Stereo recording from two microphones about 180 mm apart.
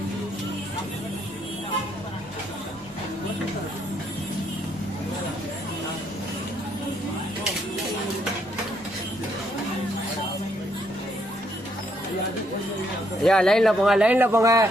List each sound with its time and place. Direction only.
13.2 s speech: 5° left (ahead or behind); by 14.7 s 15° right (ahead or behind)